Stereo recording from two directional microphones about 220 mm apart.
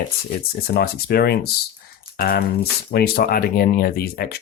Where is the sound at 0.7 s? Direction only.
45° left (ahead or behind).